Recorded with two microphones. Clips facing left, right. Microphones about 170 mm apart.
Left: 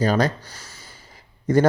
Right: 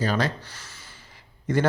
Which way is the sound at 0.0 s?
40° left (ahead or behind).